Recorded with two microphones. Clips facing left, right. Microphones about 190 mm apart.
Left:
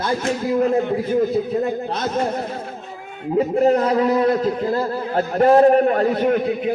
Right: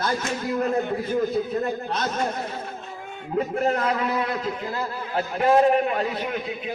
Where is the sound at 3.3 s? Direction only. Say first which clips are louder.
Left 7 dB; 35° left (ahead or behind).